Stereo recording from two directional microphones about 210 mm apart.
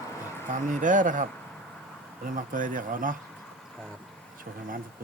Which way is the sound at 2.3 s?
40° right (ahead or behind).